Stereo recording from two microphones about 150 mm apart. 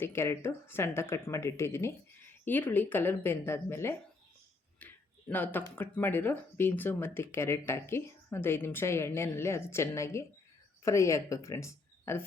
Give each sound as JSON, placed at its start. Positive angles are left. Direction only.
{"t": 0.0, "sound": "speech", "side_deg": 15}
{"t": 4.8, "sound": "a sound", "side_deg": 10}
{"t": 5.3, "sound": "speech", "side_deg": 10}